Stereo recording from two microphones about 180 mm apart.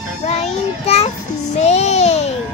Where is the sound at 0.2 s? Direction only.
35° left (ahead or behind).